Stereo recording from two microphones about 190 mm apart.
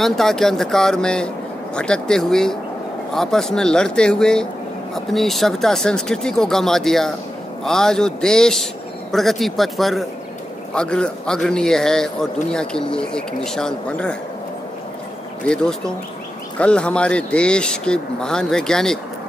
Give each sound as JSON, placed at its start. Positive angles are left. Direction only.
{"t": 0.0, "sound": "a man's voice", "side_deg": 0}
{"t": 15.4, "sound": "a man's voice", "side_deg": 5}